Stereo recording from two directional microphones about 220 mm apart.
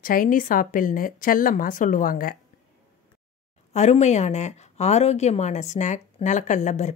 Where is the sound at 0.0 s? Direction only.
40° left (ahead or behind).